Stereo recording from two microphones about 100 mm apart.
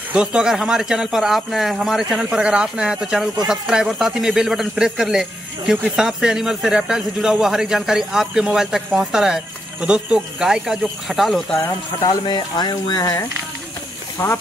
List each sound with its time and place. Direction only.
0.1 s speech: 10° right (ahead or behind)
11.6 s speech: 35° left (ahead or behind)
12.3 s speech: 50° left (ahead or behind); by 14.3 s 30° left (ahead or behind)